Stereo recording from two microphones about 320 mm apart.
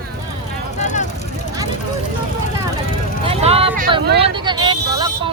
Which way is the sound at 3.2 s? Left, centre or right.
Centre.